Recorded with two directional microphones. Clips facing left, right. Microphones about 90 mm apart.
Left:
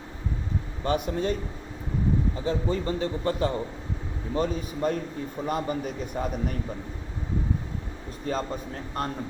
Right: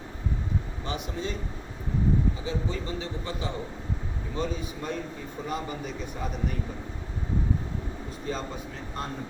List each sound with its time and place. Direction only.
0.9 s speech: 50° left (ahead or behind)
2.4 s speech: 50° left (ahead or behind)
8.3 s speech: 45° left (ahead or behind)